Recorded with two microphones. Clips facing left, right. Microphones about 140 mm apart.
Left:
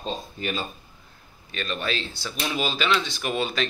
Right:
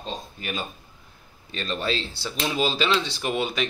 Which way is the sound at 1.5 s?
30° right (ahead or behind).